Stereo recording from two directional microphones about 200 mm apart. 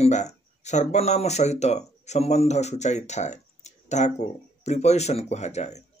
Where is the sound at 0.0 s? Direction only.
35° left (ahead or behind).